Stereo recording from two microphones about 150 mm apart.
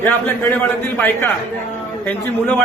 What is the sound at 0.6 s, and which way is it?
Speech, 15° left (ahead or behind).